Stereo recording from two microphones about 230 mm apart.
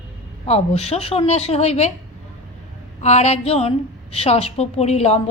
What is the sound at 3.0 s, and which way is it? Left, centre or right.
A woman's voice, left.